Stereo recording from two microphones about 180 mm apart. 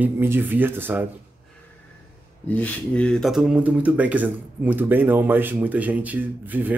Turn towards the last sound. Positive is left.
turn(degrees=-10)  # may be behind; listen again after turning